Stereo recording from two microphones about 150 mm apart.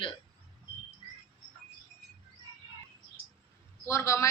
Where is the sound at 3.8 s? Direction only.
20° left (ahead or behind).